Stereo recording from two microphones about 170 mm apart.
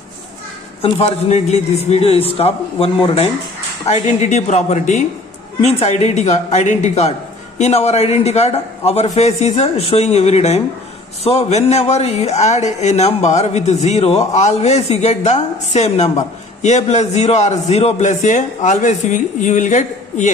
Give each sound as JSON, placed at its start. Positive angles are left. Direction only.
{"t": 0.8, "sound": "a man's voice", "side_deg": 40}